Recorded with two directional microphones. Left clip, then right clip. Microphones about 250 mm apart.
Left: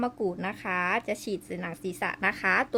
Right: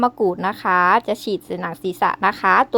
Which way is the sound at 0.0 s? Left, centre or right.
Centre.